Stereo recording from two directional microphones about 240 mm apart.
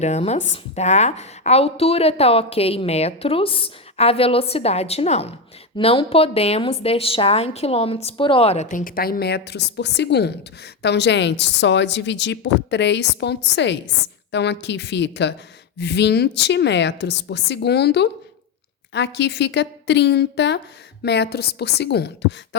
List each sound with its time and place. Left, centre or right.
0.0 s a woman's voice: left